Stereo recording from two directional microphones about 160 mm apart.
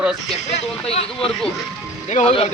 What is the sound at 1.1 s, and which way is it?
Speech, 5° left (ahead or behind).